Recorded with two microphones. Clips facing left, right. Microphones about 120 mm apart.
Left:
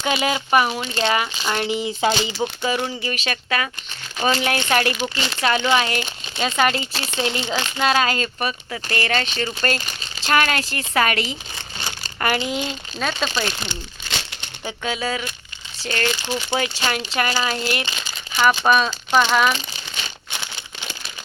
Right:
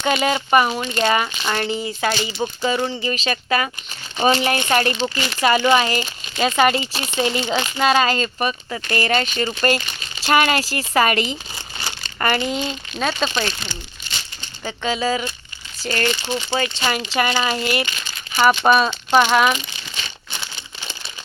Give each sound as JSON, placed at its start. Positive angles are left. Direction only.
{"t": 0.0, "sound": "speech", "side_deg": 0}
{"t": 2.4, "sound": "speech", "side_deg": 5}
{"t": 14.6, "sound": "speech", "side_deg": 5}
{"t": 16.5, "sound": "speech", "side_deg": 10}
{"t": 16.8, "sound": "speech", "side_deg": 0}